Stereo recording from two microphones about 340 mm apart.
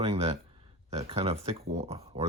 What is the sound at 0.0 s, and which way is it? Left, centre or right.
Speech, centre.